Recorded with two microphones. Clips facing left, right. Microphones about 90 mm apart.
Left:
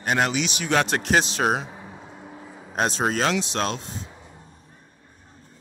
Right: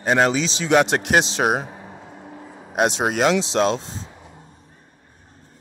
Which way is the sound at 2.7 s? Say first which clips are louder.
Right 4 dB; 15° right (ahead or behind).